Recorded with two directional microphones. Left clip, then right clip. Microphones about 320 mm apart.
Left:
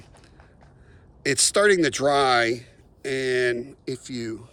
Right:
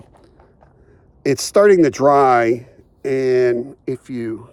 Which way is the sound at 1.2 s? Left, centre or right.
Centre.